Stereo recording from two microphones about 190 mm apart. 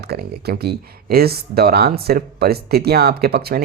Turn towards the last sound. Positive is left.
turn(degrees=-55)  # may be behind; listen again after turning